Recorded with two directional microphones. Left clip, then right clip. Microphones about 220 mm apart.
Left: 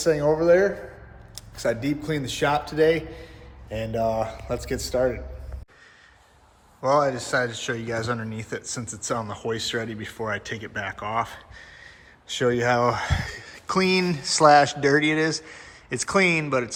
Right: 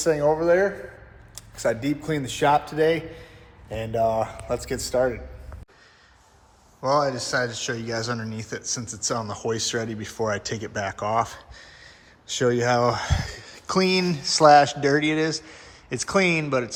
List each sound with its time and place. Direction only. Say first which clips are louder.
0.0 s a man's voice: even; centre (ahead or behind)
6.8 s speech: left 1 dB; 5° right (ahead or behind)